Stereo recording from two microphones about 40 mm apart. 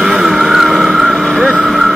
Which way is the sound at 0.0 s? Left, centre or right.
Centre.